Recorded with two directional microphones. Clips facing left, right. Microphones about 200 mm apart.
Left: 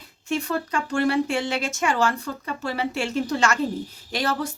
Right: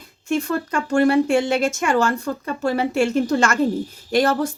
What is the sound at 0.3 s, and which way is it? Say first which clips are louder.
A woman's voice: right 4 dB; 45° right (ahead or behind).